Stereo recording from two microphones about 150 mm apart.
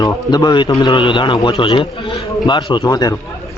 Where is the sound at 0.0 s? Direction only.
25° left (ahead or behind).